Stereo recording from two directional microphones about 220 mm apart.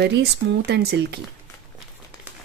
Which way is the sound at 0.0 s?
50° right (ahead or behind).